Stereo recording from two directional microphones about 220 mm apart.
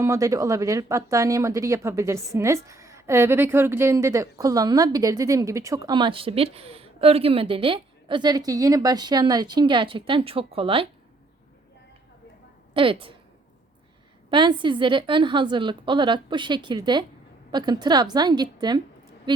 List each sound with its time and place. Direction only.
0.0 s speech: 15° right (ahead or behind)
12.7 s a woman's voice: 25° right (ahead or behind)
14.3 s a woman's voice: 20° right (ahead or behind)